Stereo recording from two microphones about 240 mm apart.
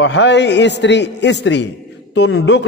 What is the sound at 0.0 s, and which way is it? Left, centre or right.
A man's voice, left.